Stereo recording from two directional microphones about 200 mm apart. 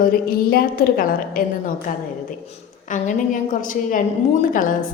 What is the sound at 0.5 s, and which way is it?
A woman's voice, 45° left (ahead or behind).